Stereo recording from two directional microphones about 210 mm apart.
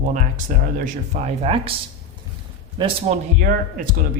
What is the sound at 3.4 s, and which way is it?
Speech, 40° right (ahead or behind).